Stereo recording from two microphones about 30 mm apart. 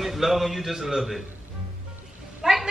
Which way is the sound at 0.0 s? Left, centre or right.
Centre.